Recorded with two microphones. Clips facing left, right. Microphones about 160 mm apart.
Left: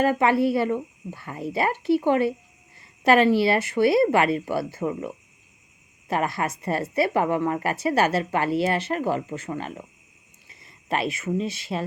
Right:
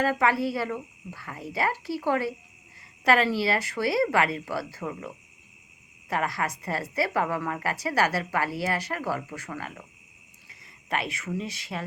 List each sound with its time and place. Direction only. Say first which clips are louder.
0.0 s a woman's voice: left 4 dB; 25° left (ahead or behind)
10.8 s a woman's voice: left 5 dB; 25° left (ahead or behind)